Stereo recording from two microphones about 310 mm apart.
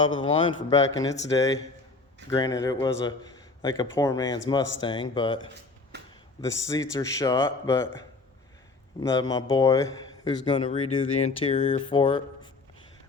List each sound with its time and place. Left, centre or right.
0.2 s a man's voice: centre
6.4 s a man's voice: centre
9.0 s a man's voice: centre